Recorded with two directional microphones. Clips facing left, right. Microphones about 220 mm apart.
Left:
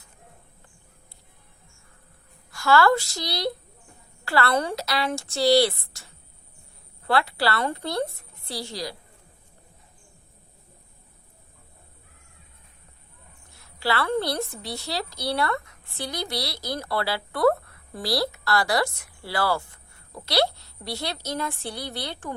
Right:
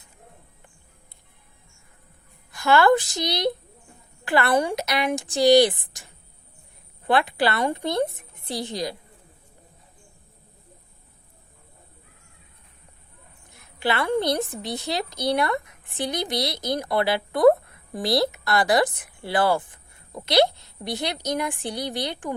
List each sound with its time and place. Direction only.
2.5 s a woman's voice: 20° right (ahead or behind)
7.1 s a woman's voice: 20° right (ahead or behind)
13.5 s a woman's voice: 20° right (ahead or behind)